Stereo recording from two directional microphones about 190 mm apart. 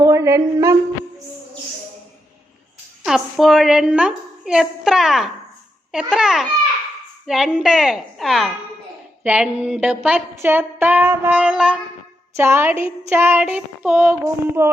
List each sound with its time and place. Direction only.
0.0 s speech: 15° right (ahead or behind)
3.0 s a woman's voice: centre (ahead or behind)
9.2 s a sound: 5° right (ahead or behind)